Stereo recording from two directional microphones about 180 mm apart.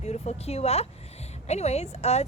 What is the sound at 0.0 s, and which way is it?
Speech, 35° left (ahead or behind).